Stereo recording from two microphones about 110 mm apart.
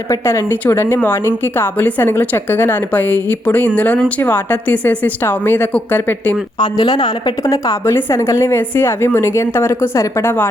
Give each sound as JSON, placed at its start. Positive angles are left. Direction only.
{"t": 0.1, "sound": "a woman's voice", "side_deg": 25}
{"t": 6.6, "sound": "a woman's voice", "side_deg": 40}